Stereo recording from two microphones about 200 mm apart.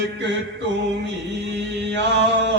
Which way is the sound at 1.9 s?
60° right (ahead or behind).